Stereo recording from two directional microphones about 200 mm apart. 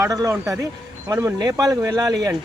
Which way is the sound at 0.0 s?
15° right (ahead or behind).